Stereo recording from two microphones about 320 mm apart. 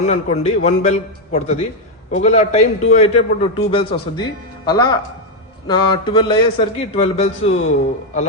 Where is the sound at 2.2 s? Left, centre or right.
Left.